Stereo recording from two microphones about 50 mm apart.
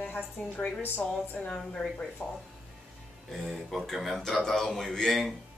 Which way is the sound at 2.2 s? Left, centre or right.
Left.